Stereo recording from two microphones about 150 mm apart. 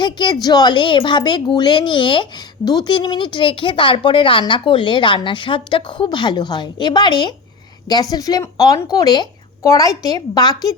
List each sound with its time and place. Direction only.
0.0 s speech: 30° left (ahead or behind)